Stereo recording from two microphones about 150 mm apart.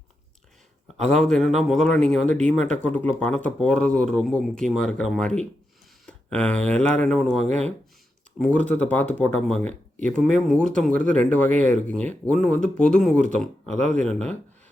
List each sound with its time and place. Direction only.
1.1 s a man's voice: centre (ahead or behind)
8.4 s a man's voice: 10° left (ahead or behind)
13.7 s speech: 50° right (ahead or behind)
14.0 s speech: 5° left (ahead or behind)